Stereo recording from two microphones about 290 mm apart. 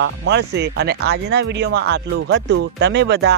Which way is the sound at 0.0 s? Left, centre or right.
Right.